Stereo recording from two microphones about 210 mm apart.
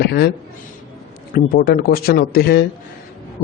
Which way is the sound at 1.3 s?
45° left (ahead or behind).